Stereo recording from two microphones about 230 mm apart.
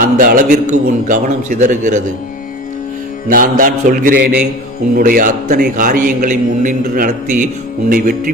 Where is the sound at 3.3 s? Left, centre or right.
Right.